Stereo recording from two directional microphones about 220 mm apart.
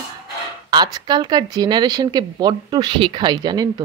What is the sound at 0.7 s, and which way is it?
Speech, 20° right (ahead or behind).